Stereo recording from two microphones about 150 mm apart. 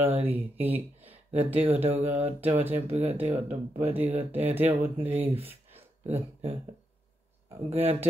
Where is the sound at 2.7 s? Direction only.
40° right (ahead or behind).